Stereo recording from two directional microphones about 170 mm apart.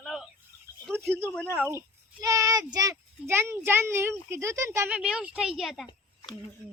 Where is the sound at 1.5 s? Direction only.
15° right (ahead or behind).